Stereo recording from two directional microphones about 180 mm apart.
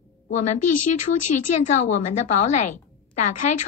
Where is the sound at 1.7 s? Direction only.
40° left (ahead or behind).